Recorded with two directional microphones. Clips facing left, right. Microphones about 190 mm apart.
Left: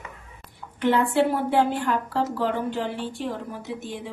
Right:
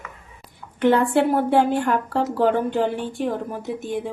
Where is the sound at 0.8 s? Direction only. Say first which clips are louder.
Right 3 dB; 50° right (ahead or behind).